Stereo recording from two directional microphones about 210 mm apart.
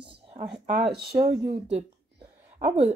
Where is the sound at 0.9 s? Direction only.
50° right (ahead or behind).